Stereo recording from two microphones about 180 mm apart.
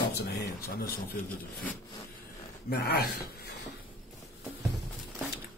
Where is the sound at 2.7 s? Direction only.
60° left (ahead or behind).